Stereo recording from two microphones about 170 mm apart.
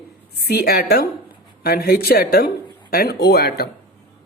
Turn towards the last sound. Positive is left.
turn(degrees=65)  # may be behind; listen again after turning